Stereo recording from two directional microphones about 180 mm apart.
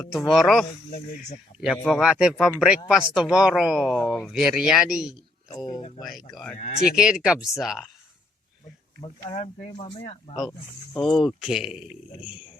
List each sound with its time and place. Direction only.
0.1 s speech: centre (ahead or behind)
1.6 s speech: 5° left (ahead or behind)
5.5 s speech: 20° left (ahead or behind)
6.0 s speech: centre (ahead or behind)
6.6 s speech: 50° left (ahead or behind)
6.9 s speech: 5° right (ahead or behind)
9.2 s speech: 35° left (ahead or behind)
10.9 s speech: centre (ahead or behind)